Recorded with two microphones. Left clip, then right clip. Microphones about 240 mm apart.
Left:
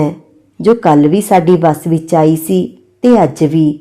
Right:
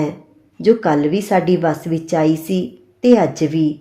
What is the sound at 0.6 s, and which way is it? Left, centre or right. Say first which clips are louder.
A woman's voice: left 6 dB; left.